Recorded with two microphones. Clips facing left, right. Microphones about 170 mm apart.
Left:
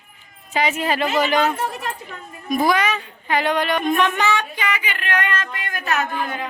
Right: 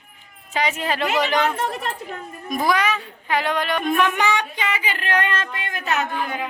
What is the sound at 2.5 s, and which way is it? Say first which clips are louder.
A child's voice: left 2 dB; centre (ahead or behind).